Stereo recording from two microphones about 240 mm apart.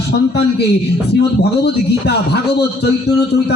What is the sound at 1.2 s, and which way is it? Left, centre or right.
A man's voice, left.